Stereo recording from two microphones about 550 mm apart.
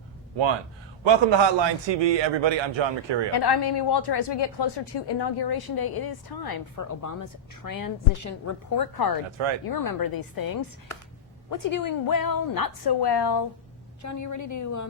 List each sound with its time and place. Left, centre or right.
1.0 s a man's voice: right
3.3 s speech: left
14.0 s speech: left